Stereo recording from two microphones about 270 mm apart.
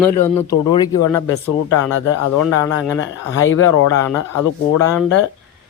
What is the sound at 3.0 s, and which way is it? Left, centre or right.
Speech, left.